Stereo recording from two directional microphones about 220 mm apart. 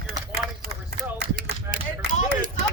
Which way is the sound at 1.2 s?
40° right (ahead or behind).